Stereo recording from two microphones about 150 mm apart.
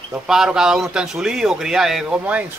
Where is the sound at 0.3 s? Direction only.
5° right (ahead or behind).